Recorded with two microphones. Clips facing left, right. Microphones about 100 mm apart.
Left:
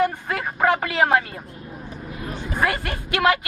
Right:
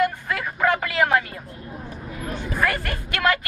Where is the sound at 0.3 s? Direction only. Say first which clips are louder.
Left 1 dB; 30° left (ahead or behind).